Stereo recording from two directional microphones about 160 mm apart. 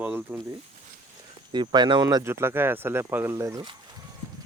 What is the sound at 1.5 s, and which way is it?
Speech, 30° right (ahead or behind).